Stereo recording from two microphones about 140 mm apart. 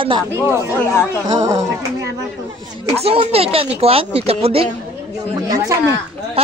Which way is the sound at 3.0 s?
45° right (ahead or behind).